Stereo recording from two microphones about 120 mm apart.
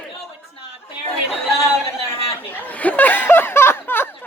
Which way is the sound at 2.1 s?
15° left (ahead or behind).